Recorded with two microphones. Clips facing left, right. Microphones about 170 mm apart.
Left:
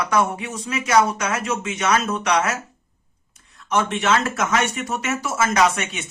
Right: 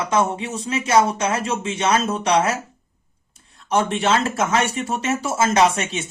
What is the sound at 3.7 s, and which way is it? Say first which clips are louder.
Speech: right 1 dB; 35° right (ahead or behind).